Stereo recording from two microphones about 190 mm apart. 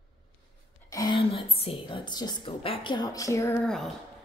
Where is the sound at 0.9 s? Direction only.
25° left (ahead or behind).